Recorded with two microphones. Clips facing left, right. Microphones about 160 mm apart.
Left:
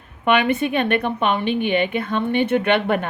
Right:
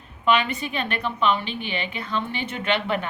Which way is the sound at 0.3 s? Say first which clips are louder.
Left 5 dB; 60° left (ahead or behind).